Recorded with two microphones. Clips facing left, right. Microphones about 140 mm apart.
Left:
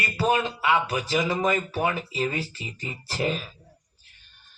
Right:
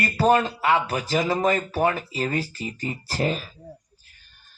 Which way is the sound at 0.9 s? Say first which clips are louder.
Right 2 dB; 50° right (ahead or behind).